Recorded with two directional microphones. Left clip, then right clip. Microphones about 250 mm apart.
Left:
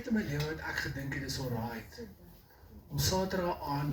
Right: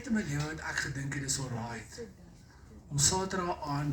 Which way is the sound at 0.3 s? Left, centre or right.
Right.